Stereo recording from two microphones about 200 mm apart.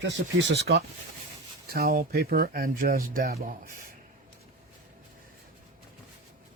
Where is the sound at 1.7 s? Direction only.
45° right (ahead or behind).